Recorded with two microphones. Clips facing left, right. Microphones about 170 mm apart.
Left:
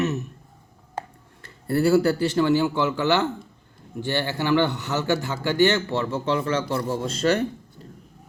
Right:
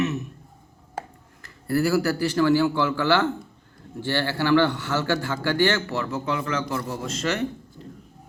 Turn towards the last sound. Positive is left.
turn(degrees=30)  # may be behind; listen again after turning